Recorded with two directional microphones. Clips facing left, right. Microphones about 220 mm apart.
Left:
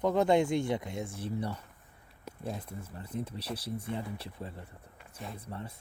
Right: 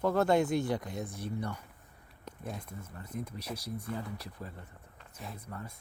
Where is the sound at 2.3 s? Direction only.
10° left (ahead or behind).